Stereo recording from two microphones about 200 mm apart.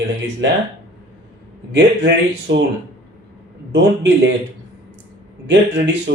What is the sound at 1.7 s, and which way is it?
Speech, 60° right (ahead or behind).